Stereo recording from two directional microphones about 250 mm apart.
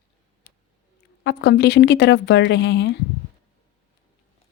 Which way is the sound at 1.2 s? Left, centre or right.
Left.